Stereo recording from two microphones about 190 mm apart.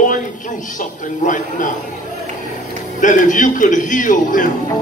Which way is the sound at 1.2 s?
40° left (ahead or behind).